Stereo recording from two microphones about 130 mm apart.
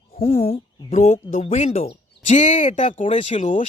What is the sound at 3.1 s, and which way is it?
Speech, 45° left (ahead or behind).